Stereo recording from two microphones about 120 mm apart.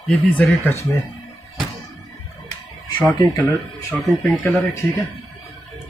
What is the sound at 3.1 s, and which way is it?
Speech, 30° left (ahead or behind).